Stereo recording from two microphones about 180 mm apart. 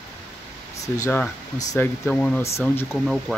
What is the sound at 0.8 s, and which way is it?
Speech, 20° left (ahead or behind).